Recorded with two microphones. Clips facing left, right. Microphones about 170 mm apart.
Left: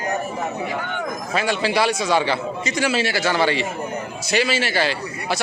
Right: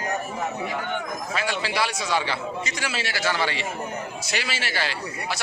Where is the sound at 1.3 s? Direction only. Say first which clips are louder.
Left 7 dB; 25° left (ahead or behind).